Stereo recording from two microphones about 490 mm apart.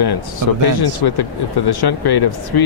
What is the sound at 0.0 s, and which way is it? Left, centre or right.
Speech, left.